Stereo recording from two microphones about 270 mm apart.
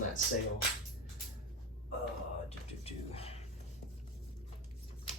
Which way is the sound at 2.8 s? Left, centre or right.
Left.